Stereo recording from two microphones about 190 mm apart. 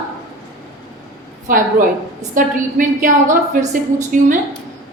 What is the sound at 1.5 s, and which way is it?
A woman's voice, 45° right (ahead or behind).